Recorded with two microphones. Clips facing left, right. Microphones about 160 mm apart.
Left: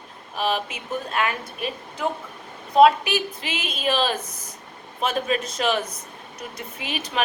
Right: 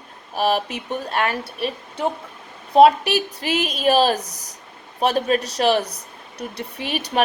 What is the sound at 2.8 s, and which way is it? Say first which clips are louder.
Speech: right 3 dB; 40° right (ahead or behind).